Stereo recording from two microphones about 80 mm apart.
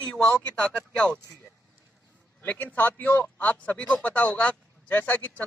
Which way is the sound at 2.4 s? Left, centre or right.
Centre.